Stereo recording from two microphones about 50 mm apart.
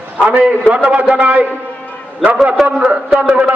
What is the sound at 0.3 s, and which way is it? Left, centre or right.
A man's voice, right.